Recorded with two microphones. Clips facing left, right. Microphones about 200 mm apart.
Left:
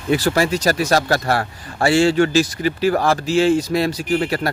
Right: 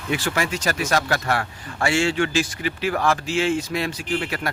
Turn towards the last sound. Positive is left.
turn(degrees=40)  # may be behind; listen again after turning